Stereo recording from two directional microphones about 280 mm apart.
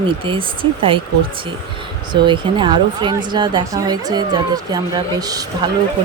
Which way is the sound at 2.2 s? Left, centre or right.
Centre.